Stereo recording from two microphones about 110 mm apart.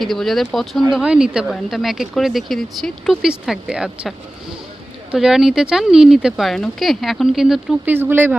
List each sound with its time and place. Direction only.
0.0 s speech: centre (ahead or behind)
5.1 s speech: 5° right (ahead or behind)
7.9 s speech: 15° right (ahead or behind)